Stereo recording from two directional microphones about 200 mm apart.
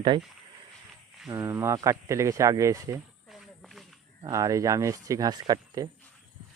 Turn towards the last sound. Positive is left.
turn(degrees=-20)  # may be behind; listen again after turning